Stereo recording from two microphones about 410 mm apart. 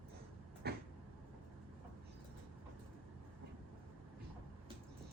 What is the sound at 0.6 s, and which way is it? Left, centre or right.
Vehicle, right.